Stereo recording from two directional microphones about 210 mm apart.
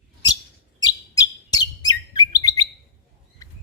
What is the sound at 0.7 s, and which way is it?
Chirp, 20° left (ahead or behind).